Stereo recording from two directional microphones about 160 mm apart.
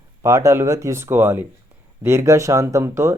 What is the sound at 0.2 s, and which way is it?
Speech, 20° right (ahead or behind).